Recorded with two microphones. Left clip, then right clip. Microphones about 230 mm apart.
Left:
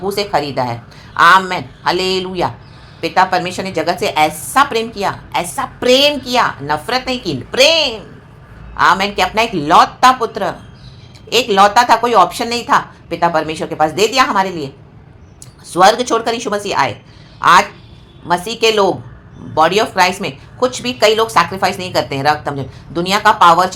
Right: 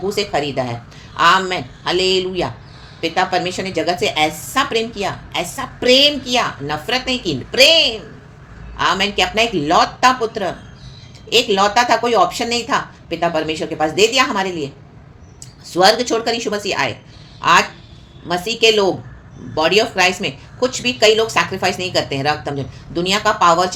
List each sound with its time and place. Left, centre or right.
0.0 s a woman's voice: centre
15.7 s a woman's voice: centre